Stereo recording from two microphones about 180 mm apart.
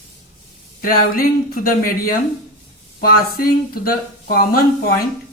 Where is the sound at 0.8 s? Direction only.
55° left (ahead or behind).